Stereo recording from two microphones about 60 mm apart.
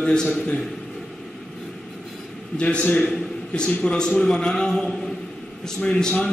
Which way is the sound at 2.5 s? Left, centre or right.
Centre.